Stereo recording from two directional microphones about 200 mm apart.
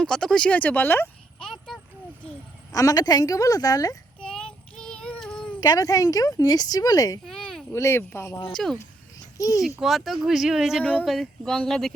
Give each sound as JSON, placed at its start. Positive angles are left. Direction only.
{"t": 0.0, "sound": "speech", "side_deg": 5}
{"t": 2.7, "sound": "speech", "side_deg": 15}
{"t": 4.2, "sound": "child singing", "side_deg": 5}
{"t": 5.5, "sound": "speech", "side_deg": 20}
{"t": 7.3, "sound": "a sound", "side_deg": 0}
{"t": 7.8, "sound": "speech", "side_deg": 10}
{"t": 8.5, "sound": "speech", "side_deg": 0}
{"t": 9.4, "sound": "speech", "side_deg": 15}
{"t": 9.8, "sound": "speech", "side_deg": 0}